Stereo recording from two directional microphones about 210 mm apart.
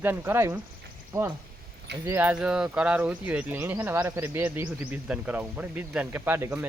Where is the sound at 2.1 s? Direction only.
10° right (ahead or behind).